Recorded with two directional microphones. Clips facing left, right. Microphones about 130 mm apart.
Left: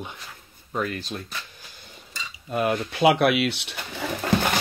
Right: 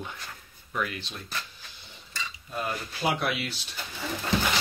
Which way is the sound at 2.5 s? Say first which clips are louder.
Left 10 dB; 65° left (ahead or behind).